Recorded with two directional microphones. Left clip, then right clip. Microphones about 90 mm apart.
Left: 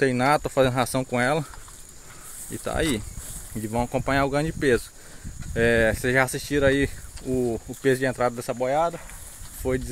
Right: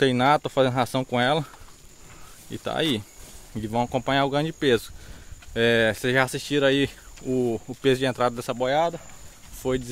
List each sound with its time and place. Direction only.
0.4 s speech: centre (ahead or behind)
2.6 s speech: 5° right (ahead or behind)
6.5 s speech: 15° right (ahead or behind)
7.2 s speech: 35° right (ahead or behind)
8.5 s speech: 55° right (ahead or behind)
9.6 s speech: 20° right (ahead or behind)